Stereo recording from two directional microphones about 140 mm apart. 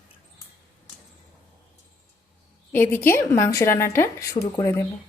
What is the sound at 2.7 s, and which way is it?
A woman's voice, 15° left (ahead or behind).